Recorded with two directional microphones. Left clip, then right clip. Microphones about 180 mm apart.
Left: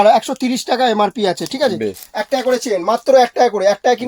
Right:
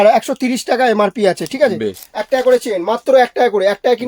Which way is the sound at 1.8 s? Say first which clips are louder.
Even; 15° right (ahead or behind).